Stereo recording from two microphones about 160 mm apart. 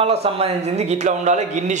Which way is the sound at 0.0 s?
40° right (ahead or behind).